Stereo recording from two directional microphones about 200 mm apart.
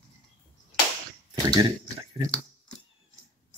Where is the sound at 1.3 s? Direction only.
20° right (ahead or behind).